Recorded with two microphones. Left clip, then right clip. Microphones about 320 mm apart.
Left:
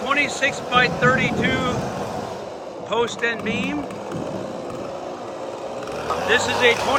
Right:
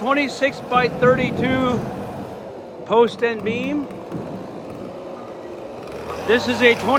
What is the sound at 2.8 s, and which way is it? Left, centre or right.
Speech, centre.